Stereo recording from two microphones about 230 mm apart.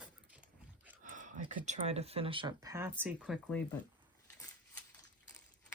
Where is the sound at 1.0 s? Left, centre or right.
Right; by 3.6 s centre.